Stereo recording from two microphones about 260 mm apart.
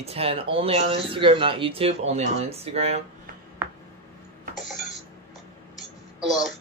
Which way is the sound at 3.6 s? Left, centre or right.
Centre.